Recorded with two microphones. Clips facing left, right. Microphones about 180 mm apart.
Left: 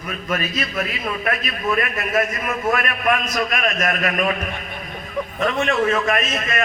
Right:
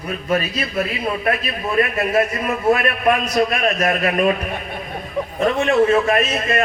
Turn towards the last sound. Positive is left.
turn(degrees=-30)  # may be behind; listen again after turning